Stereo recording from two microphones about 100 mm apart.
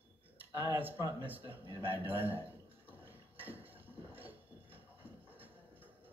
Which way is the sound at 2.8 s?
20° right (ahead or behind).